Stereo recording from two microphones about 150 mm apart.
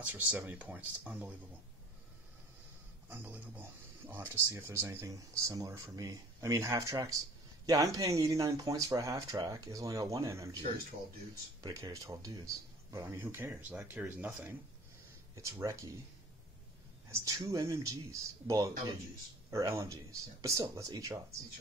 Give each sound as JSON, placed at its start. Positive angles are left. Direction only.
{"t": 0.1, "sound": "speech", "side_deg": -10}
{"t": 3.1, "sound": "speech", "side_deg": -10}
{"t": 11.6, "sound": "speech", "side_deg": -25}
{"t": 15.3, "sound": "speech", "side_deg": -20}
{"t": 17.1, "sound": "speech", "side_deg": -20}